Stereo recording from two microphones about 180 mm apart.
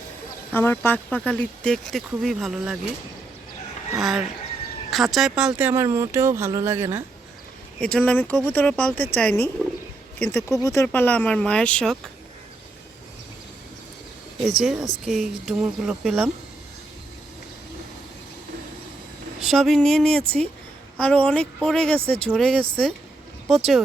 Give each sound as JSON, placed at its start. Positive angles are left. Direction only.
{"t": 0.5, "sound": "speech", "side_deg": 10}
{"t": 3.9, "sound": "speech", "side_deg": 0}
{"t": 7.8, "sound": "speech", "side_deg": 5}
{"t": 14.4, "sound": "speech", "side_deg": 0}
{"t": 19.4, "sound": "speech", "side_deg": 0}